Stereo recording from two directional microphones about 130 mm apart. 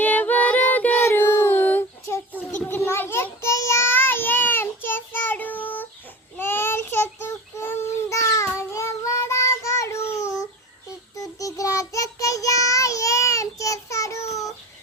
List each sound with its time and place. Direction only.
0.0 s child singing: 15° left (ahead or behind)